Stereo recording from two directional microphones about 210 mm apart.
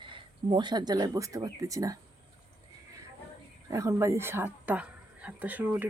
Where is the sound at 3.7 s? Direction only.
15° right (ahead or behind).